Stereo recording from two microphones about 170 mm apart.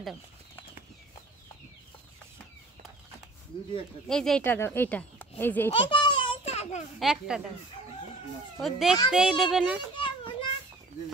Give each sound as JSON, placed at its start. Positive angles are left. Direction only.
{"t": 4.1, "sound": "speech", "side_deg": 5}
{"t": 5.7, "sound": "a sound", "side_deg": 30}
{"t": 7.0, "sound": "speech", "side_deg": -5}
{"t": 8.5, "sound": "speech", "side_deg": 0}
{"t": 9.9, "sound": "children playing", "side_deg": 30}